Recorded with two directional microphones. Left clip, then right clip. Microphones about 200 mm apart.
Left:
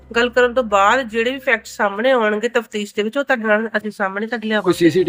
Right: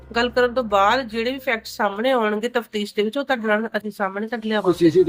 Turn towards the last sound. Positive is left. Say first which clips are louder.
# left 2 dB
turn(degrees=0)  # may be behind; listen again after turning